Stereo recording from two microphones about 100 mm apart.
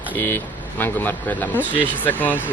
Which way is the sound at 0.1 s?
20° left (ahead or behind).